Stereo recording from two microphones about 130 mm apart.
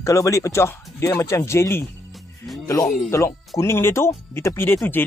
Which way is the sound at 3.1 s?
25° left (ahead or behind).